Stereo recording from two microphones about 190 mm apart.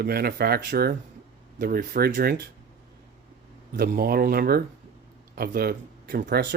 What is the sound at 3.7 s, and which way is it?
Speech, 55° right (ahead or behind).